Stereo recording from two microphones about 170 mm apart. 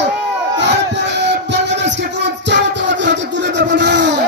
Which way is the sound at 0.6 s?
90° right.